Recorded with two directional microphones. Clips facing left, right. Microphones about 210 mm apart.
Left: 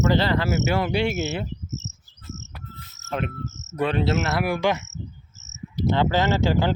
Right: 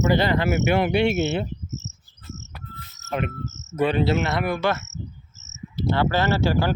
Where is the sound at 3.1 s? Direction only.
5° right (ahead or behind).